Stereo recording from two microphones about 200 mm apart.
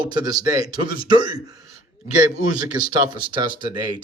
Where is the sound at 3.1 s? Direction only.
20° right (ahead or behind).